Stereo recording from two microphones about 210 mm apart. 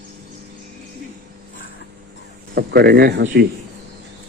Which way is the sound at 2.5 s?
50° right (ahead or behind).